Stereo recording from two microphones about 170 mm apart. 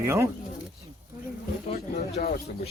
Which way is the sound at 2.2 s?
55° left (ahead or behind).